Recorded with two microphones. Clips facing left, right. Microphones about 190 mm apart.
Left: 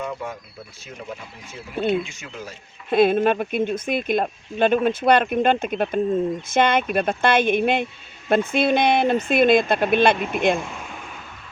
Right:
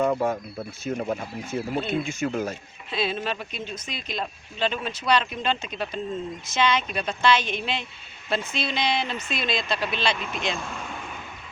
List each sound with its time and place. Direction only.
0.0 s speech: 55° right (ahead or behind)
2.9 s speech: 55° left (ahead or behind)